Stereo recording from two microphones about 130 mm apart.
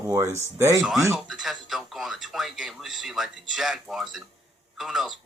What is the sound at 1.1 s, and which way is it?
Speech, 5° right (ahead or behind).